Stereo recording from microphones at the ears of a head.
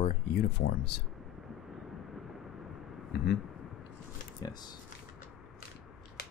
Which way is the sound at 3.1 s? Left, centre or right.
Left.